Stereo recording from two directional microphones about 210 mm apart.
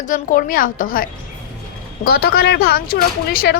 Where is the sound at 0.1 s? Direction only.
40° left (ahead or behind).